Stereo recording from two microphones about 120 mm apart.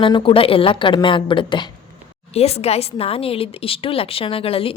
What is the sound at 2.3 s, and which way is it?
A woman's voice, 60° left (ahead or behind).